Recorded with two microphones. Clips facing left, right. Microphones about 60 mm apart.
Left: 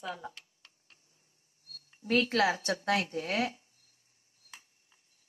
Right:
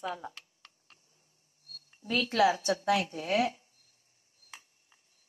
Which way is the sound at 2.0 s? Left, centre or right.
Left.